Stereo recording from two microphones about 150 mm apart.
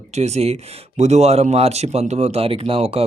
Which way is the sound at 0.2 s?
45° right (ahead or behind).